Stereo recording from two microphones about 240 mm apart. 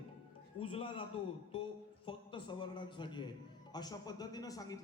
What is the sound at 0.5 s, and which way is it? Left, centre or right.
Speech, left.